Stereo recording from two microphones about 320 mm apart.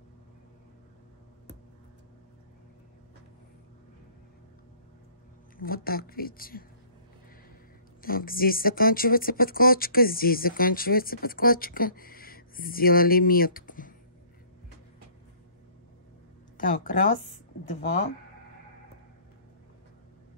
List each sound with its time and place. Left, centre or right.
5.6 s speech: left
8.0 s speech: left
16.5 s speech: left